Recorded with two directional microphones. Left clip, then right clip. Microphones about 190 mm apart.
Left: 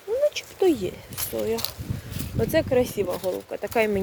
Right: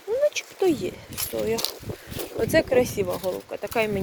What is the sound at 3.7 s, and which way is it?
Speech, 25° left (ahead or behind).